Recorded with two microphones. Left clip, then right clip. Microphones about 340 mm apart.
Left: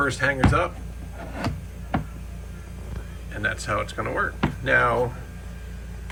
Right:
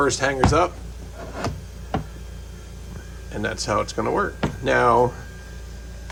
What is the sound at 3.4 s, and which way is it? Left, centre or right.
Speech, centre.